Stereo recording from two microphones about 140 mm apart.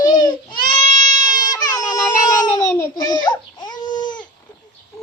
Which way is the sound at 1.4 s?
25° left (ahead or behind).